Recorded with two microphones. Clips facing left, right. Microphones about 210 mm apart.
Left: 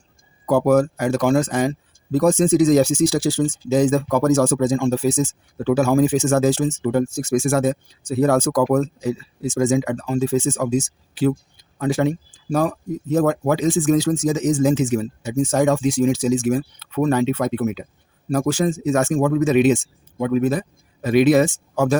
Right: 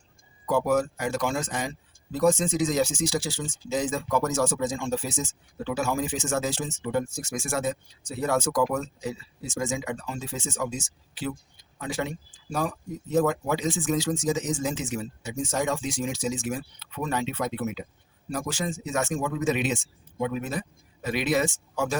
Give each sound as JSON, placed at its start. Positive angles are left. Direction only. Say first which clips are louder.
{"t": 0.4, "sound": "speech", "louder": "left 8 dB", "side_deg": 50}
{"t": 3.9, "sound": "speech", "louder": "left 8 dB", "side_deg": 60}
{"t": 4.4, "sound": "speech", "louder": "left 9 dB", "side_deg": 45}
{"t": 6.5, "sound": "speech", "louder": "left 9 dB", "side_deg": 40}
{"t": 7.3, "sound": "speech", "louder": "left 11 dB", "side_deg": 65}
{"t": 7.6, "sound": "speech", "louder": "left 9 dB", "side_deg": 45}
{"t": 16.6, "sound": "speech", "louder": "left 12 dB", "side_deg": 55}
{"t": 20.1, "sound": "speech", "louder": "left 10 dB", "side_deg": 55}